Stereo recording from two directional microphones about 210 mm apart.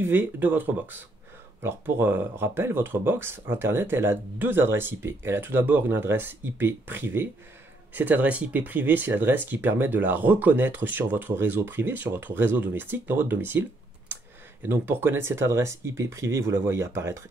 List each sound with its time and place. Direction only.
0.0 s speech: 10° right (ahead or behind)